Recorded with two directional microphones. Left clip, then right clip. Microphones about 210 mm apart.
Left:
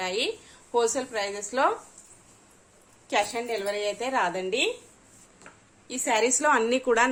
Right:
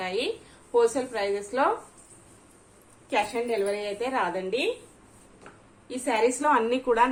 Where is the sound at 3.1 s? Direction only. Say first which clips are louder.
Even; 35° left (ahead or behind).